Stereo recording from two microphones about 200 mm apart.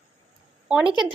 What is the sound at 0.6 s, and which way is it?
Speech, 5° right (ahead or behind).